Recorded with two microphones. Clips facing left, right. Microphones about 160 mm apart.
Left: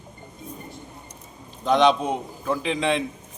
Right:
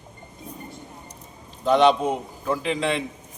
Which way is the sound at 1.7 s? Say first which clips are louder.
Right 1 dB; 5° right (ahead or behind).